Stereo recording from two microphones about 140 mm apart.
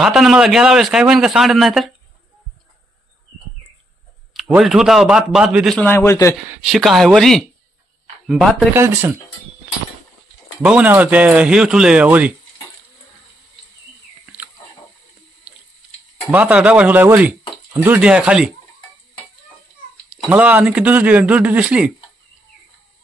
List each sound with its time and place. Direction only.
0.0 s a man's voice: 5° right (ahead or behind)
4.3 s a man's voice: centre (ahead or behind)
5.8 s a man's voice: 15° left (ahead or behind)
6.6 s a man's voice: centre (ahead or behind)
8.7 s speech: 15° right (ahead or behind)
10.6 s speech: 10° right (ahead or behind)
16.3 s speech: 10° right (ahead or behind)
20.1 s speech: 10° right (ahead or behind)